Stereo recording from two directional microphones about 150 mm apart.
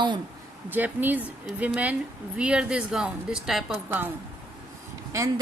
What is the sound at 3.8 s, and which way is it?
Speech, 15° right (ahead or behind).